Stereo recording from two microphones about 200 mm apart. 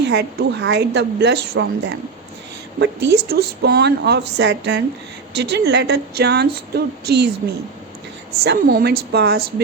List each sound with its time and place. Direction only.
0.0 s speech: 55° right (ahead or behind)
2.7 s speech: 60° right (ahead or behind)
8.4 s a woman's voice: 50° right (ahead or behind)